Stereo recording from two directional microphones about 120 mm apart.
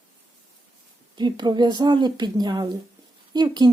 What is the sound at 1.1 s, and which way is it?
Speech, 35° right (ahead or behind).